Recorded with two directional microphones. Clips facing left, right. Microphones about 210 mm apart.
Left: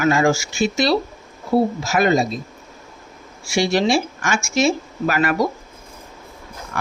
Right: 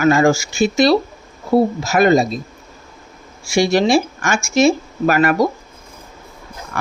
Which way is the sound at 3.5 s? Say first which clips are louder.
Right 4 dB; 45° right (ahead or behind).